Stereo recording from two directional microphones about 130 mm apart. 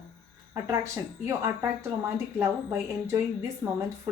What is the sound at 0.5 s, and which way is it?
Speech, 25° right (ahead or behind).